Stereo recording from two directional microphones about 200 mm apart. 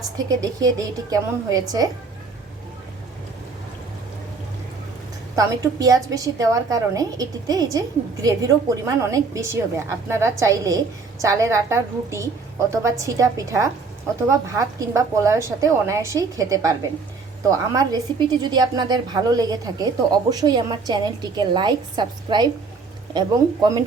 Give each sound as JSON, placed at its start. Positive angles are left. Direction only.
{"t": 0.3, "sound": "a woman's voice", "side_deg": -20}
{"t": 5.4, "sound": "a woman's voice", "side_deg": -15}